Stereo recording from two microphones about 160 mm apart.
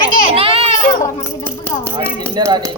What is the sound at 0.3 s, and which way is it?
Children playing, 35° right (ahead or behind).